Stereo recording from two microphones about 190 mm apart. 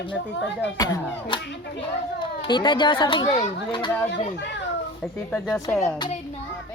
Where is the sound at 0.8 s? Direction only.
20° left (ahead or behind).